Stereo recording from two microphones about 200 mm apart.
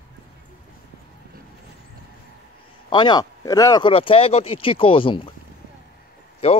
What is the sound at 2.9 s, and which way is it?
Speech, 20° left (ahead or behind).